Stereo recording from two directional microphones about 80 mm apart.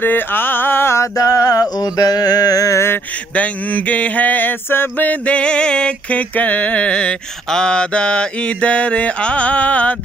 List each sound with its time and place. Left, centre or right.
0.0 s mantra: left
1.1 s mantra: left
3.3 s mantra: centre